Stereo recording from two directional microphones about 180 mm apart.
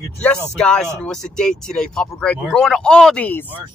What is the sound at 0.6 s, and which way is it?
Speech, 5° left (ahead or behind).